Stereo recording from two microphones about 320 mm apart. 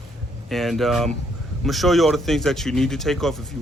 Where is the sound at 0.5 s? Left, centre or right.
Centre.